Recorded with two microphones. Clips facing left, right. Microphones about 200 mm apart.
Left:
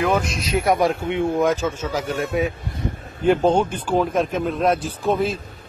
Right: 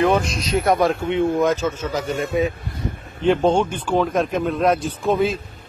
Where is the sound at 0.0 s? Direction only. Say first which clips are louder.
Right 3 dB; centre (ahead or behind).